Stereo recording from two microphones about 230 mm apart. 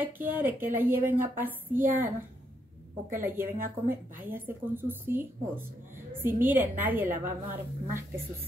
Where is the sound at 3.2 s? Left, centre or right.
Centre.